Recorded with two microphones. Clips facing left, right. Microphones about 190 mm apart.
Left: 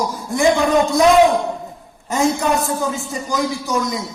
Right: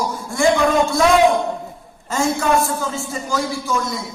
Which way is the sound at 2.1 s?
20° left (ahead or behind).